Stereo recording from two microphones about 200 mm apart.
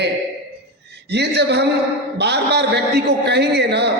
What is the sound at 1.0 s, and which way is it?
A man's voice, 55° right (ahead or behind).